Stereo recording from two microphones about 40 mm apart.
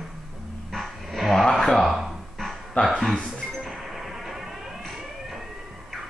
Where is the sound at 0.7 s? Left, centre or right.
Centre.